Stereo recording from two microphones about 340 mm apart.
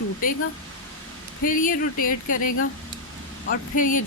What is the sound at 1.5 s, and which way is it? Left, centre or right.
Speech, left.